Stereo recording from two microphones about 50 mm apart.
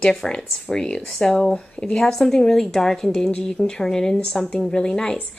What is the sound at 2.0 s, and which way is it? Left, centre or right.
Speech, centre.